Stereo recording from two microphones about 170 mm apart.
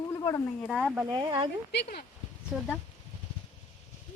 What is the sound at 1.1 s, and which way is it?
Speech, 25° right (ahead or behind).